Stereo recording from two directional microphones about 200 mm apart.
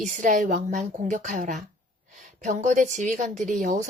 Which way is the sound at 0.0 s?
40° right (ahead or behind).